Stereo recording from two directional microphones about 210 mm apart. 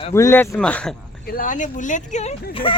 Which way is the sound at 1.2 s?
40° left (ahead or behind).